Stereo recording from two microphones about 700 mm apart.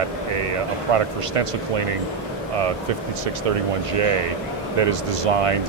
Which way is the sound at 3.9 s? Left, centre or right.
Right.